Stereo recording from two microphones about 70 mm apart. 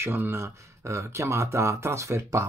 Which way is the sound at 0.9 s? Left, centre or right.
Right.